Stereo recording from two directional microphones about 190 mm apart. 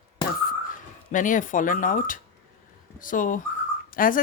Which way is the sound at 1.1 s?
45° left (ahead or behind).